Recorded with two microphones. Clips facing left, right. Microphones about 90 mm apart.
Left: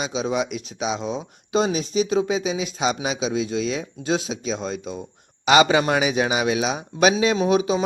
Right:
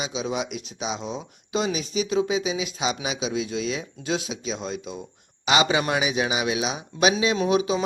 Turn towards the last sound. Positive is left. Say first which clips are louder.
# left 2 dB
turn(degrees=40)  # may be behind; listen again after turning